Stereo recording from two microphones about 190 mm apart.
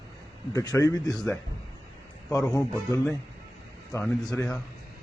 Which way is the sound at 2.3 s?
15° left (ahead or behind).